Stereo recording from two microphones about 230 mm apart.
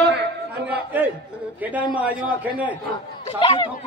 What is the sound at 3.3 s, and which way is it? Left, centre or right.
Speech, left.